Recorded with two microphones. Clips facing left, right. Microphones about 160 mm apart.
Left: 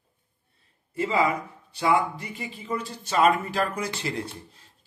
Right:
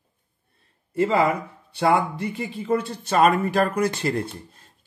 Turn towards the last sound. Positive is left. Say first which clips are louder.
# right 5 dB
turn(degrees=-50)  # may be behind; listen again after turning